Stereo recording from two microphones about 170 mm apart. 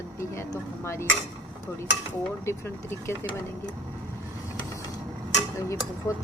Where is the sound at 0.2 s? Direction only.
15° left (ahead or behind).